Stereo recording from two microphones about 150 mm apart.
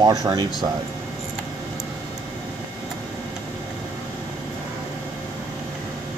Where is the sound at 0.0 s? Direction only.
25° right (ahead or behind).